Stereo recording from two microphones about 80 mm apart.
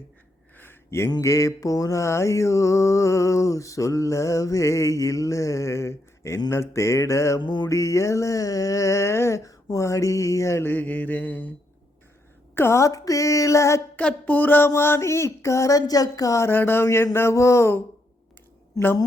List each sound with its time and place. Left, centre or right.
0.5 s a sound: left
1.2 s mantra: left
7.3 s music: left
7.7 s mantra: left
12.5 s mantra: left
13.9 s a sound: centre
14.7 s mantra: left
16.5 s mantra: left